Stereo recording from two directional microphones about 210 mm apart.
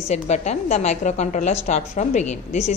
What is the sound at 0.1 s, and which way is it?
A woman's voice, 30° left (ahead or behind).